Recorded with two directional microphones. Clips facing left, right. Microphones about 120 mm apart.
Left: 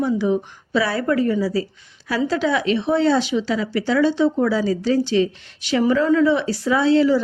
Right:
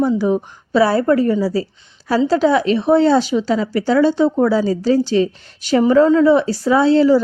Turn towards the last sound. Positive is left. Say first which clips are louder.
# right 4 dB
turn(degrees=-35)  # may be behind; listen again after turning